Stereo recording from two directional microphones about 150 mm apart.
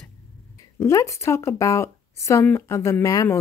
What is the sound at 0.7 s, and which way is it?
A woman's voice, 20° left (ahead or behind).